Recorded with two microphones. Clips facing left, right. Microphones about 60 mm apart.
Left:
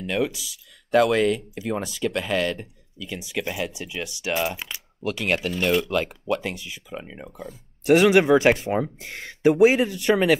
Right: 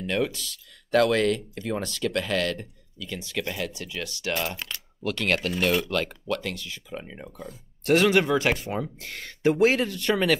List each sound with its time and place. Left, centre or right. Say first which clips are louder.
0.0 s speech: left 2 dB; centre
5.5 s speech: left 2 dB; centre
5.9 s speech: left 3 dB; centre